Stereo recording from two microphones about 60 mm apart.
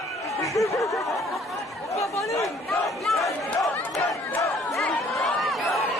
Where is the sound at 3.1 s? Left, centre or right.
Left.